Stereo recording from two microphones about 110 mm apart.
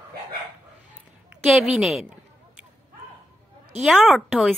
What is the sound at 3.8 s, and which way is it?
Speech, centre (ahead or behind).